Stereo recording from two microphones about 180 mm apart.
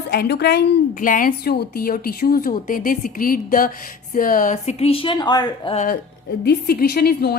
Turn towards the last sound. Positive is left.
turn(degrees=60)  # may be behind; listen again after turning